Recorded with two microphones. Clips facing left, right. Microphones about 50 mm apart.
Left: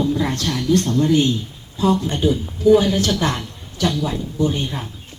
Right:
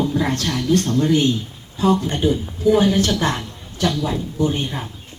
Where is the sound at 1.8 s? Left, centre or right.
Right.